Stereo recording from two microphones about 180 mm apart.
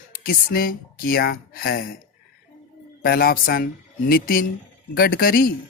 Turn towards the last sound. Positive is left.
turn(degrees=55)  # may be behind; listen again after turning